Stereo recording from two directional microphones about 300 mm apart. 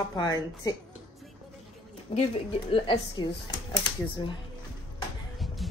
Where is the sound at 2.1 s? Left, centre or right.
Centre.